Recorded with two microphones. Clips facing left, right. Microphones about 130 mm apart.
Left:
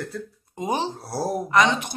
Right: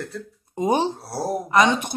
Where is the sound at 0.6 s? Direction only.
25° right (ahead or behind).